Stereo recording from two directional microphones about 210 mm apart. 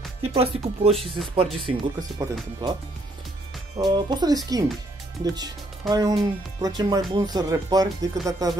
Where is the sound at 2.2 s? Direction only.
15° right (ahead or behind).